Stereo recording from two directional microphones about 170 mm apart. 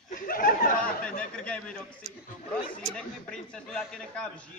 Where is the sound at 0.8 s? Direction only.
5° left (ahead or behind).